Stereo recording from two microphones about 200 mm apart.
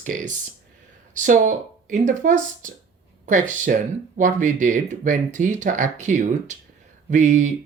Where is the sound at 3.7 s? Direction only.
45° right (ahead or behind).